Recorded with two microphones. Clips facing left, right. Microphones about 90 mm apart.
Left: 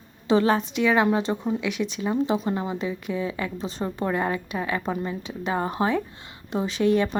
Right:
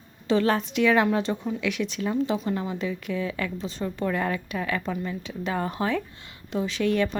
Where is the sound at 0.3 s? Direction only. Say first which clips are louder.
Left 2 dB; 15° left (ahead or behind).